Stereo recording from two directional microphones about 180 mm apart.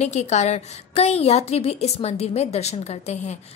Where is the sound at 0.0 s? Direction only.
40° left (ahead or behind).